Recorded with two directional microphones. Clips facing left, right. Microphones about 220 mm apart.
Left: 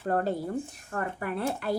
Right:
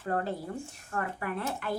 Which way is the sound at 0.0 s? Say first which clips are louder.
Left 4 dB; 40° left (ahead or behind).